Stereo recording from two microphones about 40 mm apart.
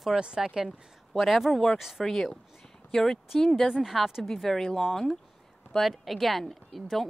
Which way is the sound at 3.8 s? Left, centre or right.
Centre.